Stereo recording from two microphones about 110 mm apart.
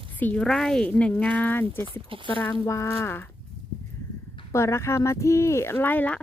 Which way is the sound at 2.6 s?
30° left (ahead or behind).